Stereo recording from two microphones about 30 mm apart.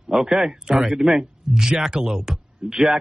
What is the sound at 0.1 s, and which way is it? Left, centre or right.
A man's voice, centre.